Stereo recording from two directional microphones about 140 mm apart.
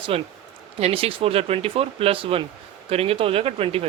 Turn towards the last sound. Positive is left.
turn(degrees=-45)  # may be behind; listen again after turning